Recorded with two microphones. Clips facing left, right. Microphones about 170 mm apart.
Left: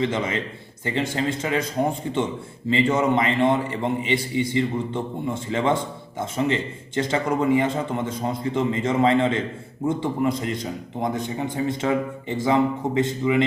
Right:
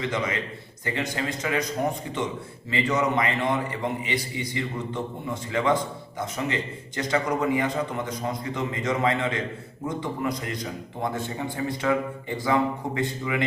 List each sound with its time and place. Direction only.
0.0 s a man's voice: 25° left (ahead or behind)